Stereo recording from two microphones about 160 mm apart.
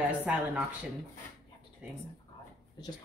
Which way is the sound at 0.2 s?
10° right (ahead or behind).